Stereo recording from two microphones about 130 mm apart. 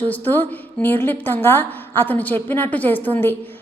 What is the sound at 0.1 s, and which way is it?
A woman's voice, 15° left (ahead or behind).